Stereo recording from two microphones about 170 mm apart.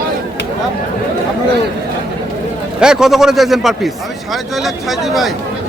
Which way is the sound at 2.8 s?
5° right (ahead or behind).